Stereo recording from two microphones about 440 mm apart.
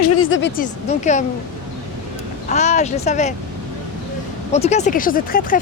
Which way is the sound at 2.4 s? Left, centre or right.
Centre.